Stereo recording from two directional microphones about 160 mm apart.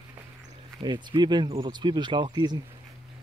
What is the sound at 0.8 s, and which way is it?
Speech, 30° right (ahead or behind).